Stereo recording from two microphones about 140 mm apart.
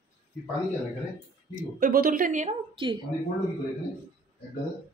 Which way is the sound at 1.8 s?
90° right.